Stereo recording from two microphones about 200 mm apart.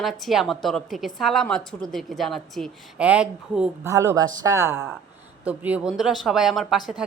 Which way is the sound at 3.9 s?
15° right (ahead or behind).